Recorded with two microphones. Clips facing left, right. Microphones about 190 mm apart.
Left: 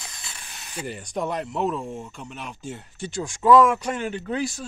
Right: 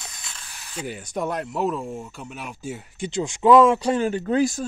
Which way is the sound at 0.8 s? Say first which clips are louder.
Right 1 dB; centre (ahead or behind).